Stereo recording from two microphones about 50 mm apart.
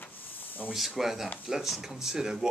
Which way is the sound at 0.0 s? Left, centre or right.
Left.